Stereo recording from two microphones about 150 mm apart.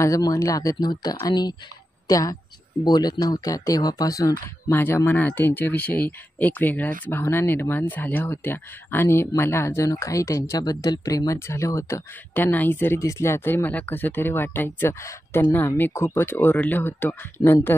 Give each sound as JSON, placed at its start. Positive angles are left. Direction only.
{"t": 0.0, "sound": "a woman's voice", "side_deg": 25}